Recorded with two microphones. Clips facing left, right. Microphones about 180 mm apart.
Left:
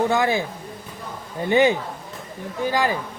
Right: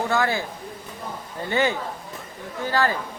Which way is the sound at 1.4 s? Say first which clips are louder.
Left 6 dB; 15° left (ahead or behind).